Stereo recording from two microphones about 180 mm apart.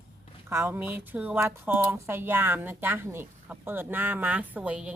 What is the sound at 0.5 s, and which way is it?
Speech, 10° right (ahead or behind).